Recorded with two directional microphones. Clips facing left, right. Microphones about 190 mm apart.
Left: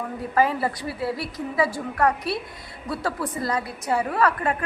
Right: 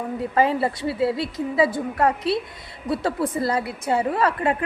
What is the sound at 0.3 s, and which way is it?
A woman's voice, 25° right (ahead or behind).